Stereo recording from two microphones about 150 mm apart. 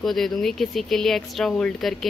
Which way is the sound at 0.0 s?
Centre (ahead or behind).